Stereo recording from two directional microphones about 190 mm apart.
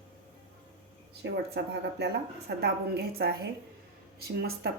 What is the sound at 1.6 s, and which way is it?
Speech, 60° right (ahead or behind).